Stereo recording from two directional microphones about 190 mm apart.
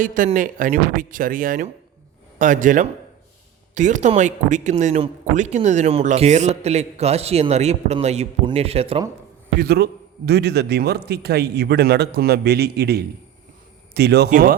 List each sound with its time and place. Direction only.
0.0 s speech: 45° right (ahead or behind)
9.6 s a man's voice: 55° right (ahead or behind)